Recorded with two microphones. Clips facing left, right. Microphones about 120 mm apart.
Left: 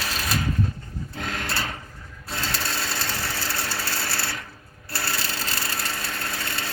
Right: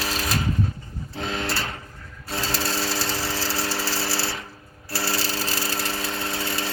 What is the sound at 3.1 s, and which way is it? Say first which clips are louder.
Ratchet: right 3 dB; 25° right (ahead or behind).